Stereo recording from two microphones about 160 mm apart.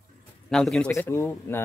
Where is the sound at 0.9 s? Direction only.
15° left (ahead or behind).